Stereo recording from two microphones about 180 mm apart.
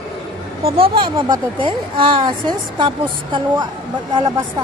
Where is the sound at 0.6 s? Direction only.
30° right (ahead or behind).